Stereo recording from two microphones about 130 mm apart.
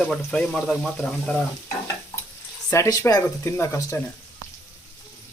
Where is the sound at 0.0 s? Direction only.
5° left (ahead or behind).